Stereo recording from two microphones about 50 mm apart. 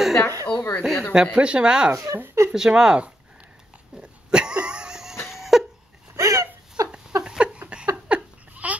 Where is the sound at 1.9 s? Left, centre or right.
Right.